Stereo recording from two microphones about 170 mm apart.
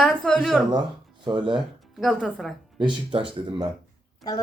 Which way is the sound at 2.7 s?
30° right (ahead or behind).